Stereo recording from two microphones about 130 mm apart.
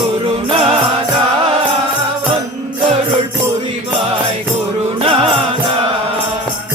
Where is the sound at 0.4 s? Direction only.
50° right (ahead or behind).